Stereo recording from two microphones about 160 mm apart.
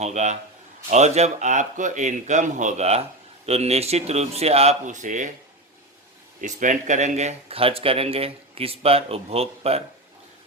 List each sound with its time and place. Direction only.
0.0 s a man's voice: 45° right (ahead or behind)
6.4 s speech: 50° right (ahead or behind)